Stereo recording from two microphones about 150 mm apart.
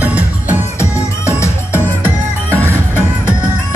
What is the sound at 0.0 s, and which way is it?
Music, 10° right (ahead or behind).